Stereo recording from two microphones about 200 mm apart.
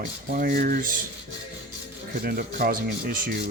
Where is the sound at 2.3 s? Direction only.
50° right (ahead or behind).